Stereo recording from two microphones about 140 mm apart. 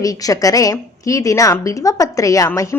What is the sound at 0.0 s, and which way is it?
Speech, 25° left (ahead or behind).